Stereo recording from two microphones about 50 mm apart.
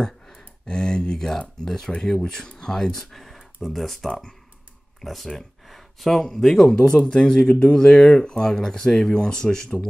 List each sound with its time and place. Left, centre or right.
0.0 s speech: centre
4.1 s speech: centre
5.0 s speech: centre